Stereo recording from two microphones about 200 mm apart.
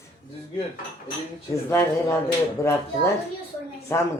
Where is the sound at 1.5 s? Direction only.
15° left (ahead or behind).